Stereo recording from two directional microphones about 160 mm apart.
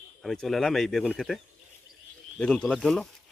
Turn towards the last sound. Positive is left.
turn(degrees=5)  # may be behind; listen again after turning